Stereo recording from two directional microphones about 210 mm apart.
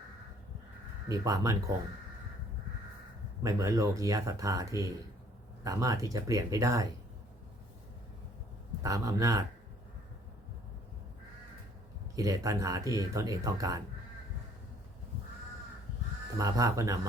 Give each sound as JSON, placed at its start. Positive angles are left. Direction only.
{"t": 1.0, "sound": "speech", "side_deg": -15}
{"t": 3.4, "sound": "speech", "side_deg": -15}
{"t": 8.8, "sound": "speech", "side_deg": -15}
{"t": 12.1, "sound": "speech", "side_deg": -15}
{"t": 16.4, "sound": "speech", "side_deg": -15}